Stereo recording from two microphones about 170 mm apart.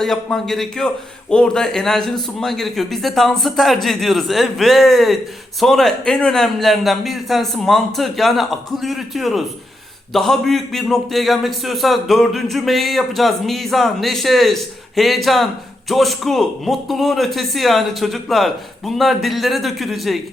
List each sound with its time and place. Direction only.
0.0 s a man's voice: centre (ahead or behind)